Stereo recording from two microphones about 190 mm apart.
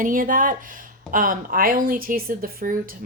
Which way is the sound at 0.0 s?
45° right (ahead or behind).